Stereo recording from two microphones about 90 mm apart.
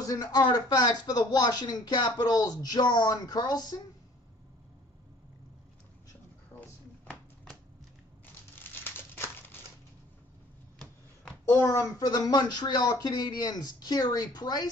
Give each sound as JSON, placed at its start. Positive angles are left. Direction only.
{"t": 0.0, "sound": "speech", "side_deg": 45}
{"t": 6.5, "sound": "a sound", "side_deg": 30}
{"t": 8.5, "sound": "crumpling", "side_deg": 25}
{"t": 11.5, "sound": "speech", "side_deg": 30}